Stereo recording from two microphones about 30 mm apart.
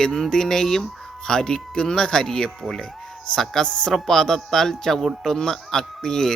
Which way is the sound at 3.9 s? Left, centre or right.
Centre.